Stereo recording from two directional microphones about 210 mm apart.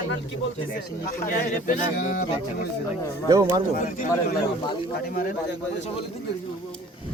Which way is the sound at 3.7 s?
40° left (ahead or behind).